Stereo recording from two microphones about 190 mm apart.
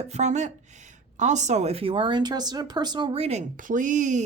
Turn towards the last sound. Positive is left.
turn(degrees=-40)  # may be behind; listen again after turning